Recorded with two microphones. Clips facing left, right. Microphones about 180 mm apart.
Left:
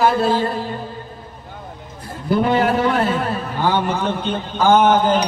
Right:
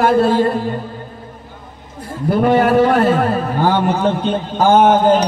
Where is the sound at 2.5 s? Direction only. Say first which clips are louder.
Right 8 dB; 50° right (ahead or behind).